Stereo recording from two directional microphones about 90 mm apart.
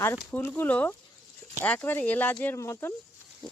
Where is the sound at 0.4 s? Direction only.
25° left (ahead or behind).